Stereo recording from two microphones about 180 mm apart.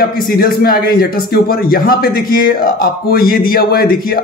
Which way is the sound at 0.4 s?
55° left (ahead or behind).